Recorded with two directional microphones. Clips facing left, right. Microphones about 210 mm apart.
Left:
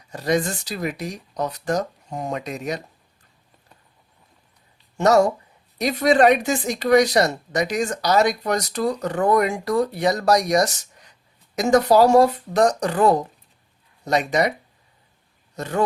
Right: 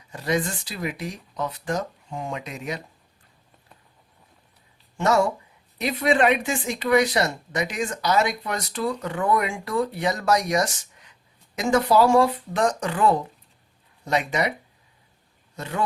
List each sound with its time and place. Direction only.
0.1 s speech: 40° left (ahead or behind)
4.9 s speech: 40° left (ahead or behind)
15.5 s speech: 45° left (ahead or behind)